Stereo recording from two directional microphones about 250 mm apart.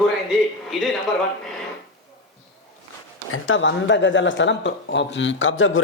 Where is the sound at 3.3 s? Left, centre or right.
Left.